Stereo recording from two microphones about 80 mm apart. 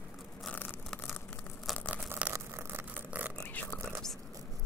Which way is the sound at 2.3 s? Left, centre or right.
Right.